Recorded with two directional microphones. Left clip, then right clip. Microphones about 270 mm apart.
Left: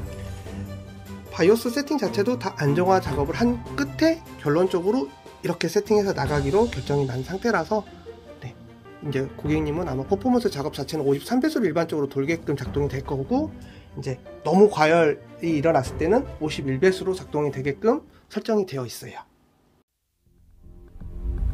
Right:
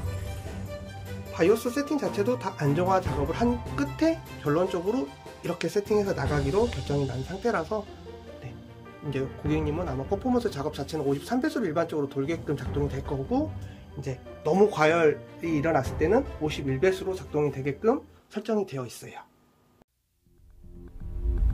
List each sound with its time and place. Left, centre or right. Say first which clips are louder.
1.3 s speech: left 4 dB; left
9.1 s speech: left 4 dB; left